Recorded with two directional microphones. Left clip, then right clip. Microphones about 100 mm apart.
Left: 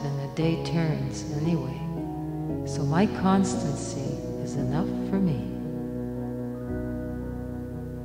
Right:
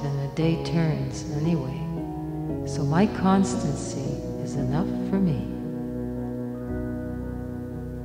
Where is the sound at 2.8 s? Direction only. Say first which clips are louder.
Right 2 dB; 30° right (ahead or behind).